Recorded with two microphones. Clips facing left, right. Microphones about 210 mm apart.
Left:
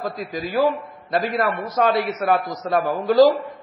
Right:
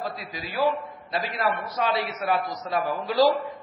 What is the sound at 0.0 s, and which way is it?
A man's voice, 45° left (ahead or behind).